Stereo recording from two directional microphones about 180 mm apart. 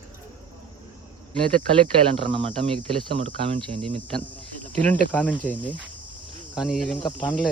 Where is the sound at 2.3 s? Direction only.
30° right (ahead or behind).